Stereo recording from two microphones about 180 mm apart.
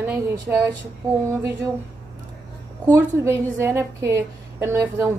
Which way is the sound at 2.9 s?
15° right (ahead or behind).